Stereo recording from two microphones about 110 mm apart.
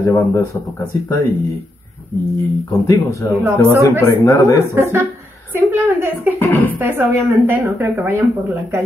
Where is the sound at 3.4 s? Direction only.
25° right (ahead or behind).